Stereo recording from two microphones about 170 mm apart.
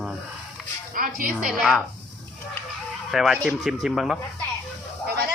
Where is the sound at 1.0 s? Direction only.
55° right (ahead or behind).